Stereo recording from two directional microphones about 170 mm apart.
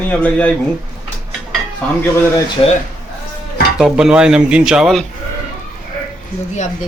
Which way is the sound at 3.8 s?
5° right (ahead or behind).